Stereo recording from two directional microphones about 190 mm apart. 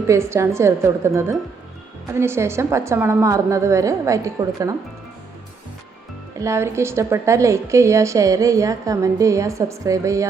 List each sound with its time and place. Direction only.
0.1 s a woman's voice: 15° right (ahead or behind)
6.4 s a woman's voice: 15° right (ahead or behind)